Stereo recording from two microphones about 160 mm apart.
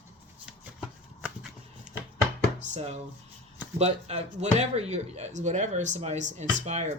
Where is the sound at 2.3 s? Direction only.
40° right (ahead or behind).